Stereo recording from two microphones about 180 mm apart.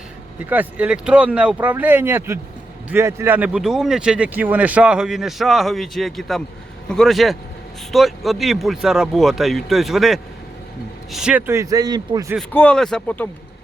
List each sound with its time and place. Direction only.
0.5 s speech: 10° right (ahead or behind)
12.4 s speech: 10° left (ahead or behind)